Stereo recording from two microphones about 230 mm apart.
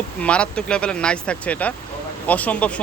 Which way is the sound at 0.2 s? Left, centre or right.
Centre.